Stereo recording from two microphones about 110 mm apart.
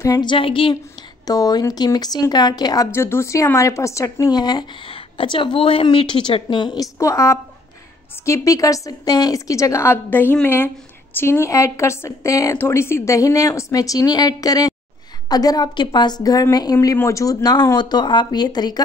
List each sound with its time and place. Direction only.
0.0 s a woman's voice: 40° left (ahead or behind)
1.2 s speech: 35° left (ahead or behind)
2.9 s speech: 20° left (ahead or behind); by 6.9 s 45° left (ahead or behind)
7.0 s a woman's voice: 25° left (ahead or behind)